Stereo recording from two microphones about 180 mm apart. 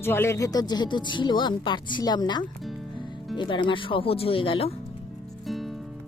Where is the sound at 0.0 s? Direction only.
15° left (ahead or behind); by 4.7 s 30° left (ahead or behind).